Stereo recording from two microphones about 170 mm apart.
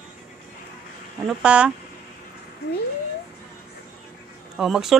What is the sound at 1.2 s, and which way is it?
Speech, 5° right (ahead or behind).